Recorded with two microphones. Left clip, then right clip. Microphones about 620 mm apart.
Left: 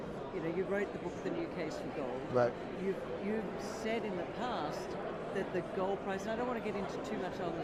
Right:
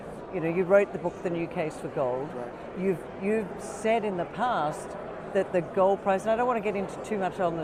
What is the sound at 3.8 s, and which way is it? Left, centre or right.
Speech, right.